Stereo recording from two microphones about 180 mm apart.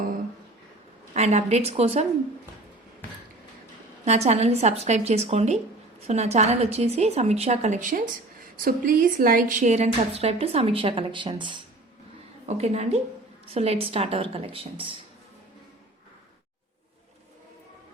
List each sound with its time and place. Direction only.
1.1 s a woman's voice: 35° right (ahead or behind)
4.0 s a woman's voice: 35° right (ahead or behind)
12.5 s a woman's voice: 35° right (ahead or behind)